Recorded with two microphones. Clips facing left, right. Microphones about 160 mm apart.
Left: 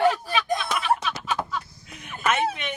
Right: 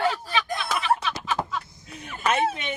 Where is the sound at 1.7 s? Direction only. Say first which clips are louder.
Right 2 dB; 20° right (ahead or behind).